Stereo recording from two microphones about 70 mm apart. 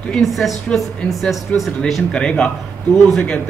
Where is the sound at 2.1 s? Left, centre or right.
Centre.